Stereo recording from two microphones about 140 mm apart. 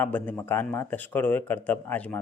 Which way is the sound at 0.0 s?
10° left (ahead or behind).